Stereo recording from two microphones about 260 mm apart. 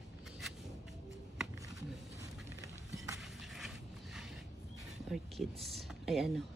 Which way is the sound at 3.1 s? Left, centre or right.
Centre.